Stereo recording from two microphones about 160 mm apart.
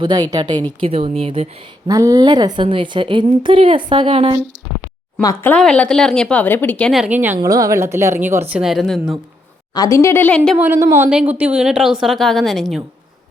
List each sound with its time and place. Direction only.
0.0 s a woman's voice: 25° right (ahead or behind)
1.9 s a woman's voice: 20° right (ahead or behind)
5.2 s speech: 20° left (ahead or behind)
7.0 s a woman's voice: 10° right (ahead or behind)
7.3 s a woman's voice: 20° right (ahead or behind); by 9.1 s centre (ahead or behind)
9.7 s speech: 20° left (ahead or behind); by 10.6 s 5° left (ahead or behind)
10.6 s a woman's voice: 10° right (ahead or behind)